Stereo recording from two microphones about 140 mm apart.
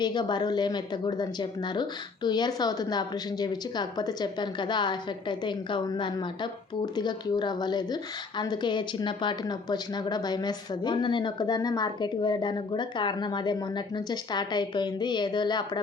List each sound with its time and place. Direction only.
0.0 s speech: 30° left (ahead or behind)